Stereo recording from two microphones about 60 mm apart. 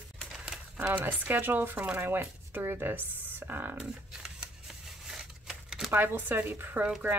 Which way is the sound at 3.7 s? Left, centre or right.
Centre.